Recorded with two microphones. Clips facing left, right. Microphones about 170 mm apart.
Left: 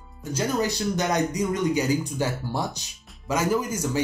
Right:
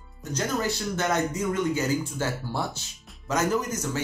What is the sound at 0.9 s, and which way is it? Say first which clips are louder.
Speech: left 2 dB; 15° left (ahead or behind).